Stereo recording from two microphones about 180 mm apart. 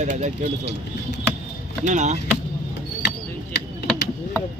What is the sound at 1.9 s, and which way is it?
Speech, 40° right (ahead or behind).